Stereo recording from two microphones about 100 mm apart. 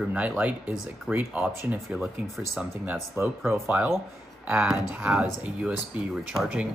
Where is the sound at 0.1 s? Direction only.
15° right (ahead or behind).